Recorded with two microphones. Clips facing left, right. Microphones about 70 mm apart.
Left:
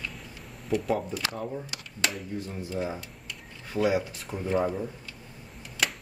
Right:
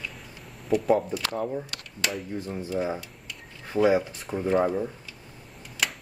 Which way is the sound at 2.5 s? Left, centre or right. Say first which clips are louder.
Right 5 dB; centre.